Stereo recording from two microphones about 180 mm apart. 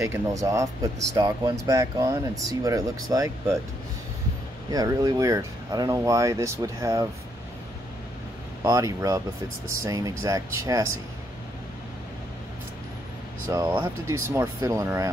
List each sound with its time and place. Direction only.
0.0 s speech: 15° right (ahead or behind)
4.6 s speech: 20° right (ahead or behind)
8.6 s speech: 20° right (ahead or behind)
13.5 s speech: 20° right (ahead or behind)